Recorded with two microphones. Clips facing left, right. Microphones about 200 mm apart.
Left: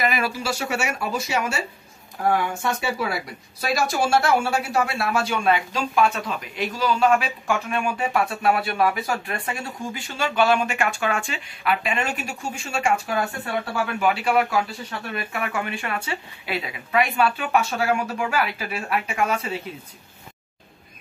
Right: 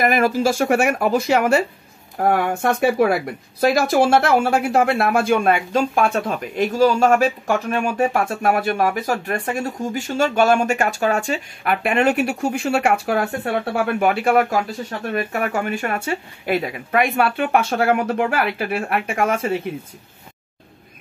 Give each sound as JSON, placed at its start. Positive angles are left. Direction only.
{"t": 0.0, "sound": "speech", "side_deg": -50}